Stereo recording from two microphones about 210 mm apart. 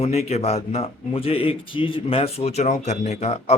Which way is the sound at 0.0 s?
30° left (ahead or behind).